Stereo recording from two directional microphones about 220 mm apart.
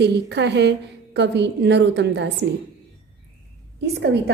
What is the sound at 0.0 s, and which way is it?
A woman's voice, 50° right (ahead or behind).